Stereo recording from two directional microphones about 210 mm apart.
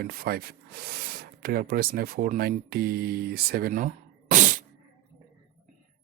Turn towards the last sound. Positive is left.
turn(degrees=-40)  # may be behind; listen again after turning